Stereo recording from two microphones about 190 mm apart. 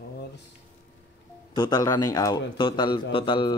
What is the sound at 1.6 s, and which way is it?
A man's voice, 20° left (ahead or behind).